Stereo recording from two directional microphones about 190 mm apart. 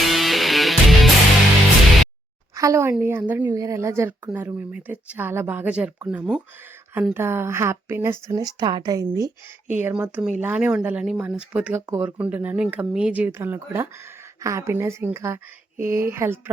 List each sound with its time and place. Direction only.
0.0 s music: centre (ahead or behind)
2.6 s speech: 15° right (ahead or behind)